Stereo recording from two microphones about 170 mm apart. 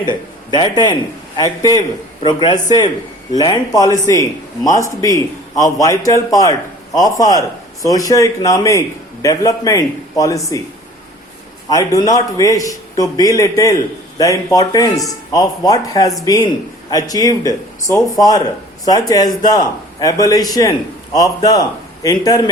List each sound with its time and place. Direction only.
0.0 s a man's voice: 25° left (ahead or behind)
11.7 s a man's voice: 20° left (ahead or behind)